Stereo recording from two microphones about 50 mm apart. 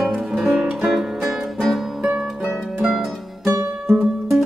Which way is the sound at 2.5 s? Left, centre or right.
Centre.